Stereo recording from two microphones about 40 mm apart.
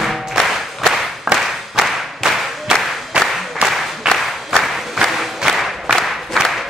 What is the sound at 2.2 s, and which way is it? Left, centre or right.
Clapping, centre.